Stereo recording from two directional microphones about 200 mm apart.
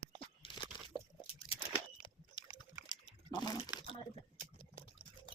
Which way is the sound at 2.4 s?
25° left (ahead or behind).